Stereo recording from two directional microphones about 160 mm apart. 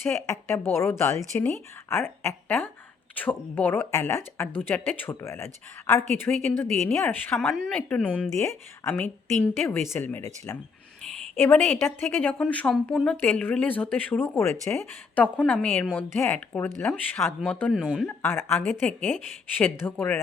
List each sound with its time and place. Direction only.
0.5 s a woman's voice: 15° left (ahead or behind)
8.4 s a woman's voice: 20° left (ahead or behind)